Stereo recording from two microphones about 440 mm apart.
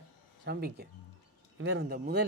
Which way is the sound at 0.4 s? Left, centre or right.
Right.